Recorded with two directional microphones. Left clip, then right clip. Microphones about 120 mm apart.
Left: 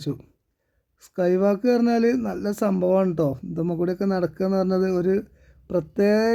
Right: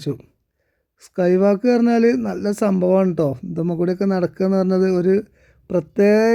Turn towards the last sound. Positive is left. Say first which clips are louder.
# right 5 dB
turn(degrees=-20)  # may be behind; listen again after turning